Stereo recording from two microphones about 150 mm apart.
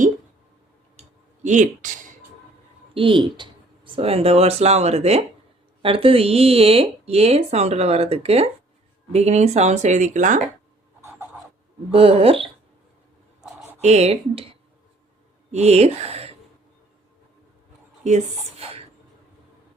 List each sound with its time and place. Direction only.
1.4 s a sound: 55° right (ahead or behind)
2.9 s speech: 35° right (ahead or behind); by 10.4 s 55° right (ahead or behind)
11.9 s speech: 40° right (ahead or behind)
13.8 s speech: 45° right (ahead or behind)
15.5 s speech: 45° right (ahead or behind)
18.0 s speech: 45° right (ahead or behind)